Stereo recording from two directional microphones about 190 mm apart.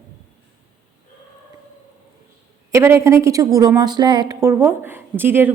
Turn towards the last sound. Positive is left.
turn(degrees=-10)  # may be behind; listen again after turning